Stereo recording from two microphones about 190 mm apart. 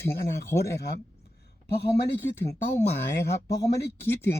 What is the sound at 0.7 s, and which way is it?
Speech, 60° left (ahead or behind).